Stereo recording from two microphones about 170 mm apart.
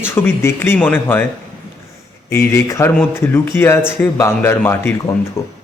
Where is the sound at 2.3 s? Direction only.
15° left (ahead or behind).